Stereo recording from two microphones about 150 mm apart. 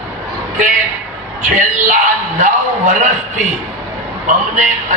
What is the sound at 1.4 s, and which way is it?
A man's voice, 55° right (ahead or behind).